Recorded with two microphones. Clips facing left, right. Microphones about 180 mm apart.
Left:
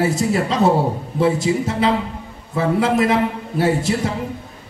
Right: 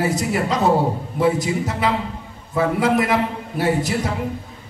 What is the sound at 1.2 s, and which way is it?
A man's voice, 25° left (ahead or behind).